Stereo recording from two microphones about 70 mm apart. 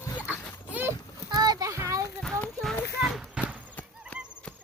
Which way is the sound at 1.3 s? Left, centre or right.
Right.